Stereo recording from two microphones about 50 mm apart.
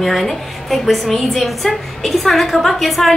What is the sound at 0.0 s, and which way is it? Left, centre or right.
A woman's voice, centre.